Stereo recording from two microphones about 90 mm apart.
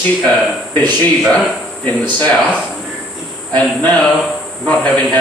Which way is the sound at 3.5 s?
15° left (ahead or behind).